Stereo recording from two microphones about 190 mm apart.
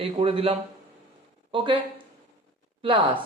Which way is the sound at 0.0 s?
30° right (ahead or behind).